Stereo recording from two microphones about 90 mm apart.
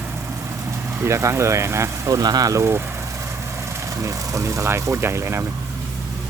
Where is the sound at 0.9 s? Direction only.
30° right (ahead or behind).